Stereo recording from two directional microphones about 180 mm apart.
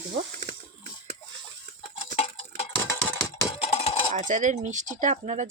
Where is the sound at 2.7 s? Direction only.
15° left (ahead or behind).